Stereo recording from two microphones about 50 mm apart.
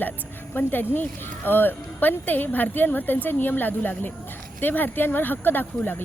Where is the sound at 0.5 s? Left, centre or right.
Left.